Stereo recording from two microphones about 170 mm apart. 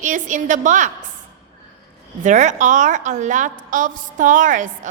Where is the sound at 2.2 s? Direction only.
45° right (ahead or behind).